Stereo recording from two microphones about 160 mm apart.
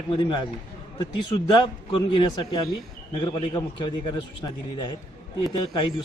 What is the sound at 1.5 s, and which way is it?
A man's voice, 30° left (ahead or behind).